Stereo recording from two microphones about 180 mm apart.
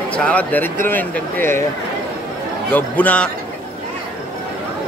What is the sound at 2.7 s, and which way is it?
Speech, 10° left (ahead or behind).